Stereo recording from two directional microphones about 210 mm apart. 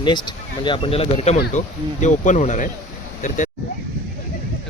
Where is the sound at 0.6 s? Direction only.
25° left (ahead or behind).